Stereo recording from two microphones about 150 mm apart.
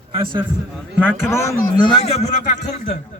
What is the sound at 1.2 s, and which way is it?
Speech, 15° left (ahead or behind).